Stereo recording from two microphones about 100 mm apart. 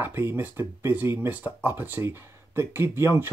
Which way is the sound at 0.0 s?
20° right (ahead or behind).